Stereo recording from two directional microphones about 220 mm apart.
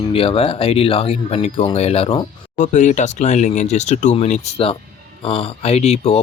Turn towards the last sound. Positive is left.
turn(degrees=30)  # may be behind; listen again after turning